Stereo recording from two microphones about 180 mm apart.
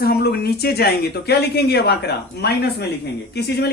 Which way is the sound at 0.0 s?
60° left (ahead or behind).